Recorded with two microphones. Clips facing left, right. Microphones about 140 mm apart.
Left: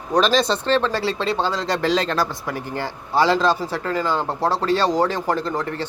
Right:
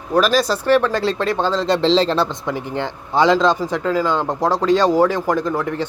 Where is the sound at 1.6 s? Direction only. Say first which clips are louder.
Right 7 dB; 25° right (ahead or behind).